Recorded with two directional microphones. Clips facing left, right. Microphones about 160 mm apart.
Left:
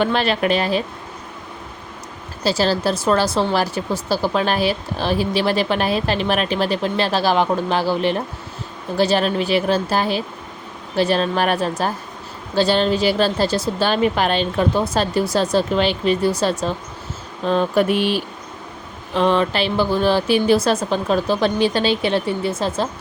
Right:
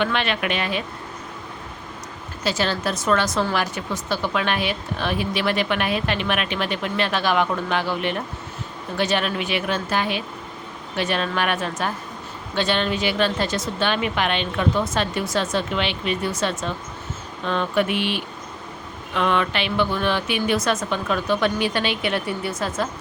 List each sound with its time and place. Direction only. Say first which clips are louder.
0.0 s speech: left 5 dB; 35° left (ahead or behind)
2.4 s speech: left 5 dB; 35° left (ahead or behind)